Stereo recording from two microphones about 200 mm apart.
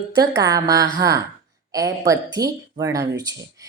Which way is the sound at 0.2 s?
20° right (ahead or behind).